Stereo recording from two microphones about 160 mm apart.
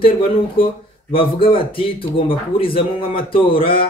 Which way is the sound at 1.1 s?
35° left (ahead or behind).